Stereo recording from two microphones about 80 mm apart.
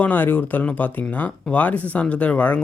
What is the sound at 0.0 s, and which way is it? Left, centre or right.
Speech, left.